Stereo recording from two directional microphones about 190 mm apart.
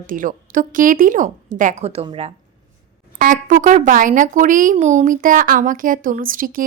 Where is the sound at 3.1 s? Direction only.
45° right (ahead or behind).